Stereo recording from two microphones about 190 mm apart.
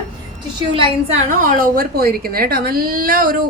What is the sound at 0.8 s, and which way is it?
A woman's voice, 35° right (ahead or behind).